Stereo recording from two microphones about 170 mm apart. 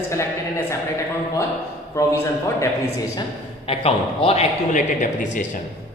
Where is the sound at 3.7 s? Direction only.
35° left (ahead or behind).